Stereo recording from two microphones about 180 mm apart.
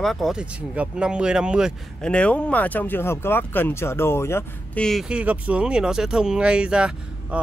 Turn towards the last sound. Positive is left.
turn(degrees=-5)  # may be behind; listen again after turning